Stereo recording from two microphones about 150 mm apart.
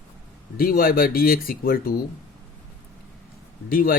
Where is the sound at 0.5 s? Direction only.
80° left.